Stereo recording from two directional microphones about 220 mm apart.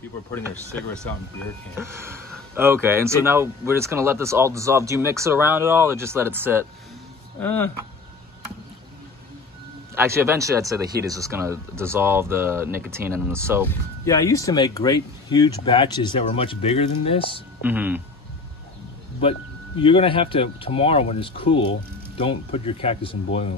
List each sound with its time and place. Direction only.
1.8 s speech: 10° right (ahead or behind)
7.3 s speech: 10° left (ahead or behind)
9.9 s speech: 10° right (ahead or behind)
13.7 s speech: 15° left (ahead or behind)
17.6 s speech: 10° right (ahead or behind)
19.8 s speech: 25° left (ahead or behind)